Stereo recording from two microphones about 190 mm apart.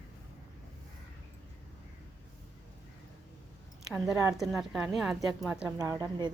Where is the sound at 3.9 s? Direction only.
Centre (ahead or behind).